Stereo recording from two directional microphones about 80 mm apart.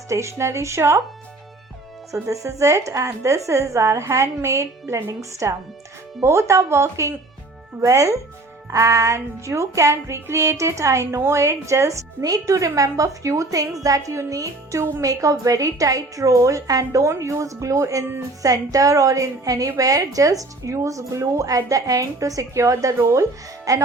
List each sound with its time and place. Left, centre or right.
0.1 s speech: right
2.2 s a woman's voice: right